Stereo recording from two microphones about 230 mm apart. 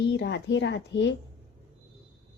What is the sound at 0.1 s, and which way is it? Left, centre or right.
Speech, left.